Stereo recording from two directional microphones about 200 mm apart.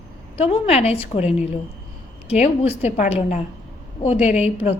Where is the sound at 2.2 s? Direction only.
30° left (ahead or behind).